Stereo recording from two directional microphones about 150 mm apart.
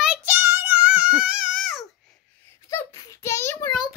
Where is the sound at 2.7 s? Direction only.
20° left (ahead or behind).